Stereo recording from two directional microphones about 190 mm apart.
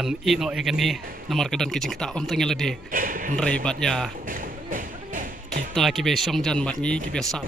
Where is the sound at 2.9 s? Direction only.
45° right (ahead or behind).